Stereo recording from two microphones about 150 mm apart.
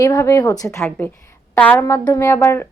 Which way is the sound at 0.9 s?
10° left (ahead or behind).